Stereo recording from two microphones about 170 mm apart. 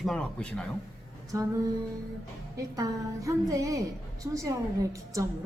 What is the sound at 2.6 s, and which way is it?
A woman's voice, 20° right (ahead or behind).